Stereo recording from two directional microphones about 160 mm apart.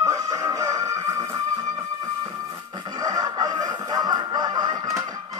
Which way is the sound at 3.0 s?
25° right (ahead or behind).